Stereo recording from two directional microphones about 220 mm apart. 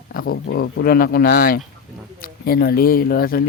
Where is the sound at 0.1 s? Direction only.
40° left (ahead or behind).